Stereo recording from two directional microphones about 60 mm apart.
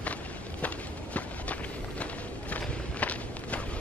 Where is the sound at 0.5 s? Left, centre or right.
Left.